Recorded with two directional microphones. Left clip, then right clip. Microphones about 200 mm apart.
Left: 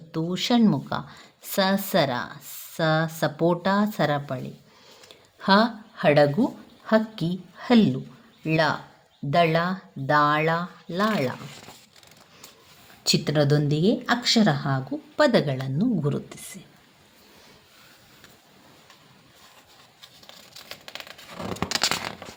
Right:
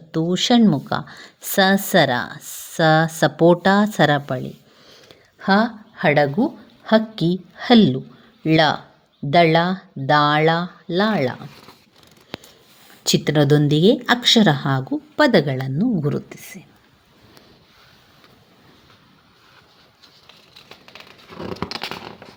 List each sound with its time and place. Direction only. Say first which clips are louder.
0.1 s speech: right 7 dB; 25° right (ahead or behind)
5.4 s a woman's voice: right 2 dB; 20° right (ahead or behind)
13.0 s speech: right 4 dB; 30° right (ahead or behind)
21.4 s a sound: left 3 dB; centre (ahead or behind)